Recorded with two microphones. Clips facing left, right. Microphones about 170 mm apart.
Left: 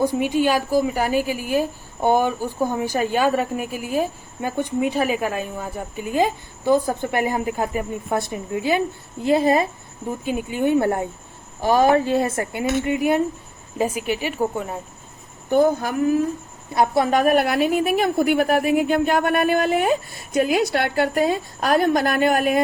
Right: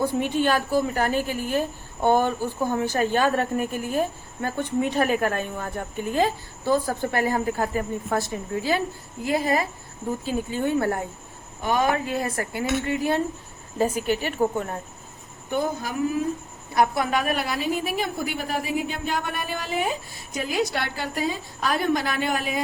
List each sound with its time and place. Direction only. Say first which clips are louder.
0.0 s a woman's voice: left 3 dB; 15° left (ahead or behind)
10.2 s speech: left 5 dB; 15° left (ahead or behind)
15.4 s speech: left 9 dB; 50° left (ahead or behind)
16.7 s a woman's voice: left 4 dB; 25° left (ahead or behind)
17.2 s a woman's voice: left 8 dB; 50° left (ahead or behind)